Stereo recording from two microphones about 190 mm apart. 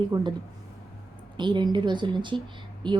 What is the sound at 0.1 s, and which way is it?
Speech, 25° right (ahead or behind).